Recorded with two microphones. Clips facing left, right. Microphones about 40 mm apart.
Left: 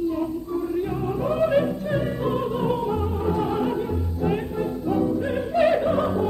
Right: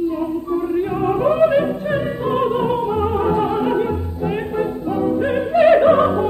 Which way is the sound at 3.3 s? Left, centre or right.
Right.